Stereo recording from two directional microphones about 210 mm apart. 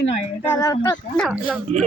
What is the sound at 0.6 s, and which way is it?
Speech, 15° left (ahead or behind).